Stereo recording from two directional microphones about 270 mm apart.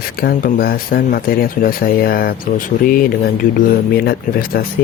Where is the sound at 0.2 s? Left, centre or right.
Left.